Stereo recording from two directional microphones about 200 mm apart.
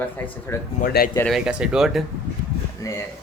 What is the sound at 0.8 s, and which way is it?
Speech, 50° left (ahead or behind).